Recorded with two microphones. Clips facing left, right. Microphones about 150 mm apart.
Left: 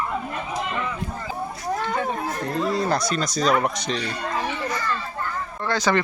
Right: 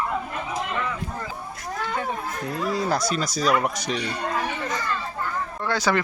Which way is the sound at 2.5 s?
5° right (ahead or behind).